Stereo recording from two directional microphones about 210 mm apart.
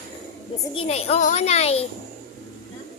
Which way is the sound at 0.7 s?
30° left (ahead or behind).